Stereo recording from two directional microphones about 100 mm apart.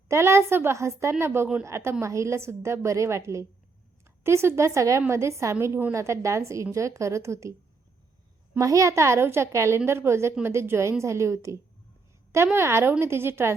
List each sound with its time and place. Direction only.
0.1 s a woman's voice: 25° right (ahead or behind)
8.5 s a woman's voice: 35° right (ahead or behind)